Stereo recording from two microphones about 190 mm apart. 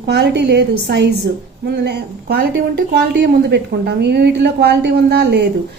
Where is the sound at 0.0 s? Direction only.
65° right (ahead or behind).